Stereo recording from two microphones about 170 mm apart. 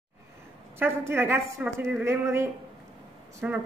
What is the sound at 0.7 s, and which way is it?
Speech, 15° right (ahead or behind).